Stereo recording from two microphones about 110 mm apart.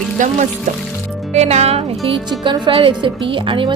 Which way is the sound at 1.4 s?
80° right.